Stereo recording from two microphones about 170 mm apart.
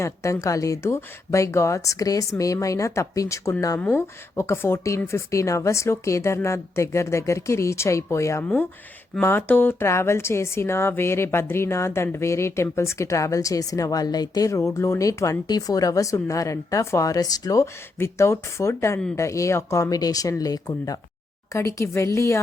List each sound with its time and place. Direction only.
0.0 s a woman's voice: 15° left (ahead or behind)